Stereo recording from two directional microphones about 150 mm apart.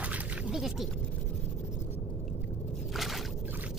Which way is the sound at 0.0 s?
5° right (ahead or behind).